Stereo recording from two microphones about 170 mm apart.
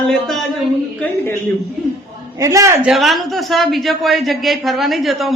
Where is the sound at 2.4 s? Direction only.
20° right (ahead or behind).